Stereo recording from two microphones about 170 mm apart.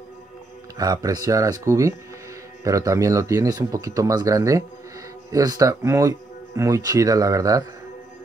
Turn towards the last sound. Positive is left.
turn(degrees=-20)  # may be behind; listen again after turning